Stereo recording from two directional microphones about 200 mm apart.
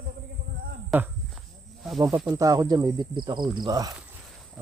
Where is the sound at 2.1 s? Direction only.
10° right (ahead or behind).